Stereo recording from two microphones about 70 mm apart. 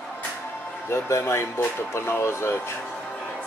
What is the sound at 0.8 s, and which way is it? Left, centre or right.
Speech, left.